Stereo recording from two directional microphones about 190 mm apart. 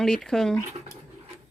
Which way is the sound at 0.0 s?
Centre (ahead or behind).